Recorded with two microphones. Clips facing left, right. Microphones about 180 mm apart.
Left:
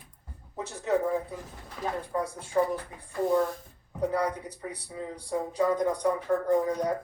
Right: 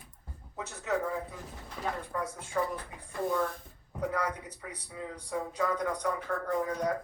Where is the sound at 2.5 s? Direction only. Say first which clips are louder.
Left 6 dB; 25° left (ahead or behind).